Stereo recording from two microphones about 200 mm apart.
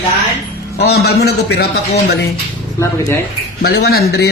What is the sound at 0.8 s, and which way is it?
Speech, 55° left (ahead or behind).